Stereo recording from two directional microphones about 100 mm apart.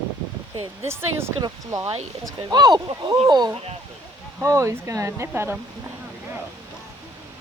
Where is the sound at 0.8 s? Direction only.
25° right (ahead or behind).